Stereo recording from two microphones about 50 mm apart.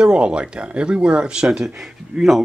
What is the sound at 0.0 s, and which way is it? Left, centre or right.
Speech, centre.